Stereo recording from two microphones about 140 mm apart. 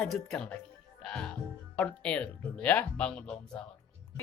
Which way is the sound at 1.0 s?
5° left (ahead or behind).